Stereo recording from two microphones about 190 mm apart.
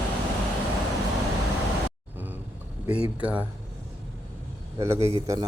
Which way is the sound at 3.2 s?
5° right (ahead or behind).